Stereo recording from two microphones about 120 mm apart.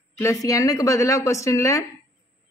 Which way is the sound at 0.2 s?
25° left (ahead or behind).